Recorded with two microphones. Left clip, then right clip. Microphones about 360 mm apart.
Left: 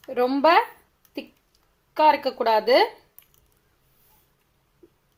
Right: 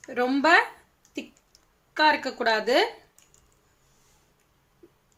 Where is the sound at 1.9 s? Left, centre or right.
Centre.